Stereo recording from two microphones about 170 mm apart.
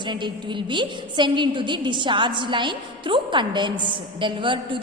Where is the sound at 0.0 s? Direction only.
25° right (ahead or behind).